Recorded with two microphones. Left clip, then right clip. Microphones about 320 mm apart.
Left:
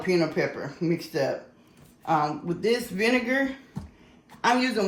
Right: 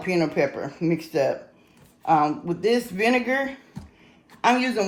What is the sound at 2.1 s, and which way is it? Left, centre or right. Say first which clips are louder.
Speech: right 5 dB; right.